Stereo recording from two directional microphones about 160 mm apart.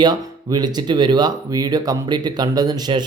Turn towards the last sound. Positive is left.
turn(degrees=-25)  # may be behind; listen again after turning